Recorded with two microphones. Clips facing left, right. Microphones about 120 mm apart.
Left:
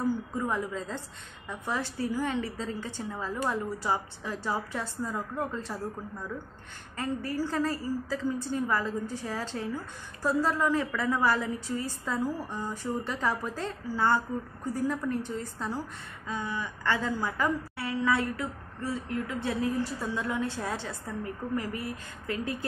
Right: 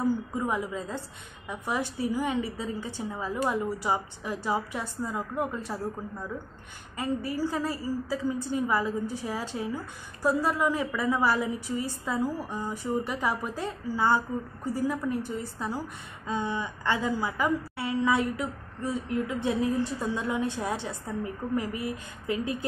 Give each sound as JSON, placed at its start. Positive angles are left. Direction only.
{"t": 0.3, "sound": "a woman's voice", "side_deg": -15}
{"t": 16.3, "sound": "a woman's voice", "side_deg": -25}